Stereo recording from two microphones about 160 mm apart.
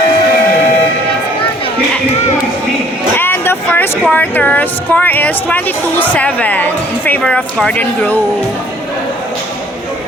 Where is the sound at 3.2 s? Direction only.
15° left (ahead or behind).